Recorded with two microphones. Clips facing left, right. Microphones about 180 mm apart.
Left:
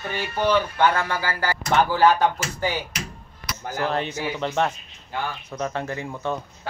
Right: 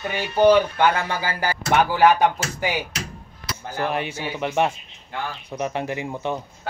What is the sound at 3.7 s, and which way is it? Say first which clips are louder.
A woman's voice: even; 15° right (ahead or behind).